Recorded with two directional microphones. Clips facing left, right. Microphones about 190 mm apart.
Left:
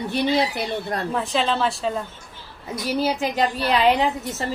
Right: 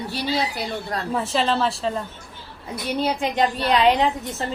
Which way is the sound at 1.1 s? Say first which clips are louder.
Right 2 dB; 5° right (ahead or behind).